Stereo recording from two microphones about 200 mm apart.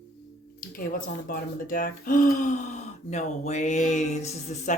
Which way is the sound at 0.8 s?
45° left (ahead or behind).